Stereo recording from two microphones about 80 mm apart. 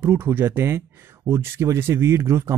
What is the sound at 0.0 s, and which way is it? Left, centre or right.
Speech, right.